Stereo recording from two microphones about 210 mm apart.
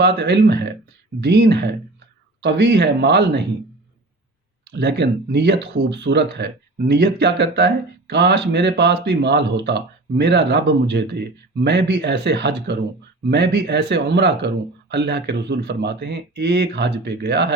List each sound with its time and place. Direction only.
0.0 s speech: 55° right (ahead or behind)
4.6 s speech: 55° right (ahead or behind)